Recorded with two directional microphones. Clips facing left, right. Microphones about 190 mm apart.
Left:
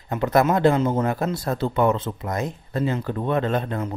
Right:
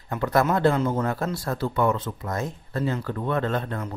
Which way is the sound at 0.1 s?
20° left (ahead or behind).